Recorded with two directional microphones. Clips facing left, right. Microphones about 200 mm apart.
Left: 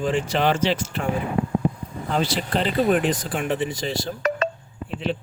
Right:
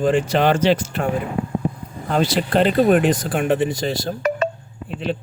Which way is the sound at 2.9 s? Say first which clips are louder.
Right 5 dB; 45° right (ahead or behind).